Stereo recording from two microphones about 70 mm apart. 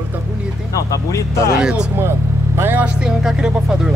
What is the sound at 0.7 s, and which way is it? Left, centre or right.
Speech, left.